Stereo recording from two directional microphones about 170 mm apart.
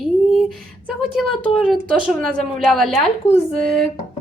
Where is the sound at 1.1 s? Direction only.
5° left (ahead or behind).